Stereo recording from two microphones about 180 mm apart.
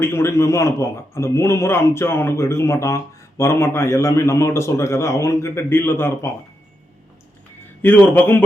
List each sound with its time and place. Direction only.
0.0 s a man's voice: 15° left (ahead or behind)
7.8 s a man's voice: 10° left (ahead or behind)